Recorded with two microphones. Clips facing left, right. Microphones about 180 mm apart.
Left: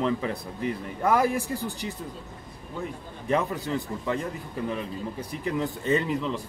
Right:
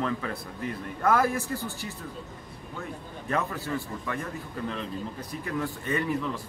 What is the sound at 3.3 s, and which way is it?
Speech, 20° left (ahead or behind).